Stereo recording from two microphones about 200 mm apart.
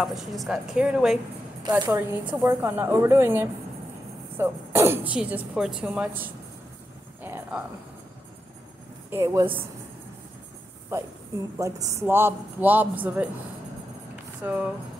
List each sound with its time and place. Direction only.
0.0 s a woman's voice: centre (ahead or behind)
1.7 s a woman's voice: 15° right (ahead or behind)
7.2 s a sound: 10° right (ahead or behind)
9.1 s speech: 15° right (ahead or behind)
10.9 s speech: 15° right (ahead or behind)
14.4 s a woman's voice: 5° right (ahead or behind)